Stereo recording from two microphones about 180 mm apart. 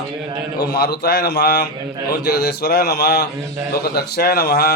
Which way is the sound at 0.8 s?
60° left (ahead or behind).